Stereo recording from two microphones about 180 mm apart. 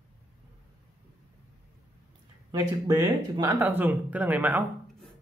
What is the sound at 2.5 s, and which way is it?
Speech, 15° right (ahead or behind).